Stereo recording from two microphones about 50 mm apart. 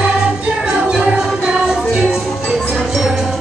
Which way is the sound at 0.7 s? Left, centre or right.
Centre.